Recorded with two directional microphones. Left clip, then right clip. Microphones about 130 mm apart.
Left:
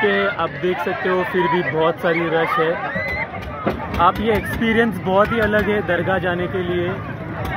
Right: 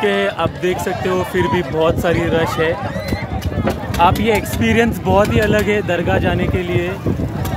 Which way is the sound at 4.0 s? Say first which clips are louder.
Right 3 dB; 35° right (ahead or behind).